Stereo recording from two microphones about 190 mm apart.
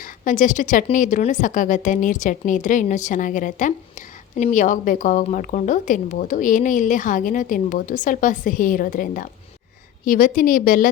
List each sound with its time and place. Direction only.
0.0 s a woman's voice: 45° left (ahead or behind)